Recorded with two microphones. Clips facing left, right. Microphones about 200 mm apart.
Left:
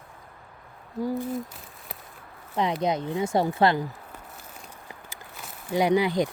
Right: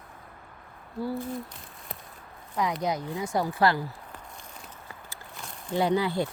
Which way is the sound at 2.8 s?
25° left (ahead or behind).